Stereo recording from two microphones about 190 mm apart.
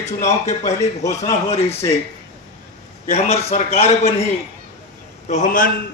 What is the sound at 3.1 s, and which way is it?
A man's voice, 35° left (ahead or behind).